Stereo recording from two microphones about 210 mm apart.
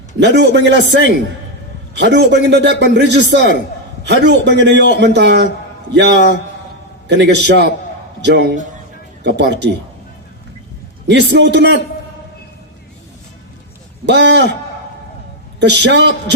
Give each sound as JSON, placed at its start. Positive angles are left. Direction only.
{"t": 0.2, "sound": "a man's voice", "side_deg": -55}
{"t": 11.1, "sound": "a man's voice", "side_deg": -50}
{"t": 14.0, "sound": "a man's voice", "side_deg": -55}
{"t": 15.6, "sound": "a man's voice", "side_deg": -55}